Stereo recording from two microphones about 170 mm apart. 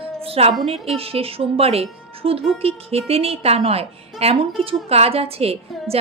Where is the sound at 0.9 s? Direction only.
35° right (ahead or behind).